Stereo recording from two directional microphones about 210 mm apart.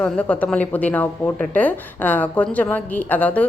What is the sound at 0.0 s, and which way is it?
A woman's voice, 5° left (ahead or behind).